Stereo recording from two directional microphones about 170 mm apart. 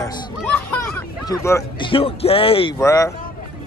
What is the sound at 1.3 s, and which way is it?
Speech, 15° left (ahead or behind).